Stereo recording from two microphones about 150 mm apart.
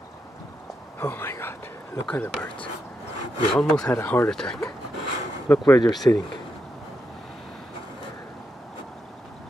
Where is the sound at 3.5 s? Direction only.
5° left (ahead or behind).